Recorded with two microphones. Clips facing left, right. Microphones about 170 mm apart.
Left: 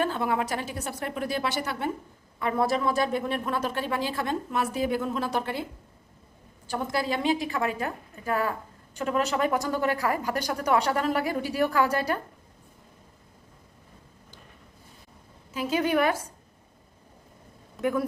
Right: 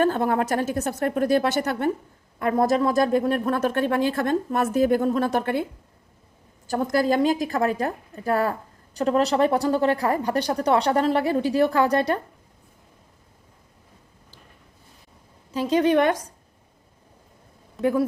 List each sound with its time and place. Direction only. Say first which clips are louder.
0.0 s speech: right 5 dB; 45° right (ahead or behind)
6.7 s speech: right 7 dB; 45° right (ahead or behind)
17.7 s speech: right 5 dB; 30° right (ahead or behind)